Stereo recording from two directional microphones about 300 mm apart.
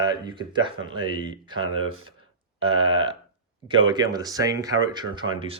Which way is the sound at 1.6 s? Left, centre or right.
Right.